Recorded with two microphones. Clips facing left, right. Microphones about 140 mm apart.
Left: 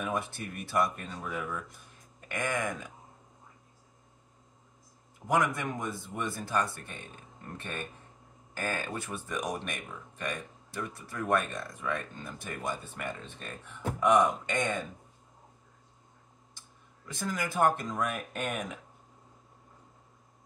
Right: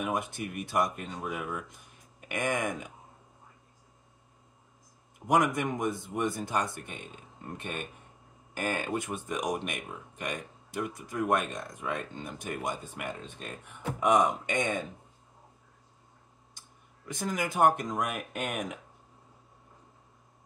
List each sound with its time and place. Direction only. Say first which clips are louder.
0.0 s speech: right 2 dB; 15° right (ahead or behind)
5.3 s speech: right 3 dB; 20° right (ahead or behind)
17.1 s speech: right 2 dB; 20° right (ahead or behind)